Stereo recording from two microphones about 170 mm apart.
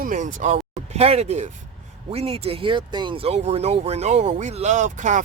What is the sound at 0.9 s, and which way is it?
Speech, 35° right (ahead or behind).